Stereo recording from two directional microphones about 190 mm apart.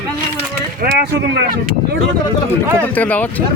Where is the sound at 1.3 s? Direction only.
55° right (ahead or behind).